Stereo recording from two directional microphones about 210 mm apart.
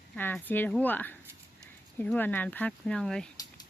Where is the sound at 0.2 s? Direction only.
10° left (ahead or behind).